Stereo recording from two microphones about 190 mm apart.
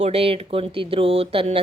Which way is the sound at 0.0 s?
30° right (ahead or behind).